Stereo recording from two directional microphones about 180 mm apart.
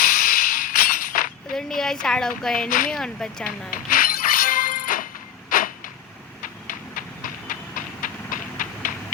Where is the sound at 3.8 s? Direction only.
50° left (ahead or behind).